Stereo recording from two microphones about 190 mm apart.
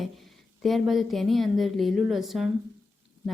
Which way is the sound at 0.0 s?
Centre (ahead or behind).